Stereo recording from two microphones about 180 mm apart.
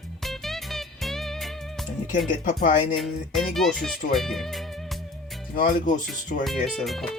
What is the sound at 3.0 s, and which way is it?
Speech, centre (ahead or behind).